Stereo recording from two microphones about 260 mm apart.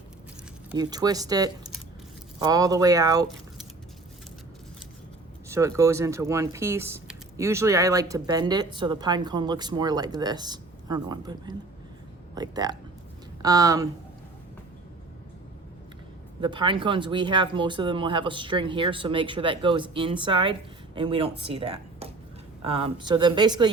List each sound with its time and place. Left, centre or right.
0.7 s speech: centre
5.5 s speech: centre
16.4 s speech: centre
22.6 s speech: right